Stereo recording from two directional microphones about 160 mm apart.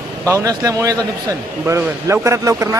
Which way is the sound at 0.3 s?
20° right (ahead or behind).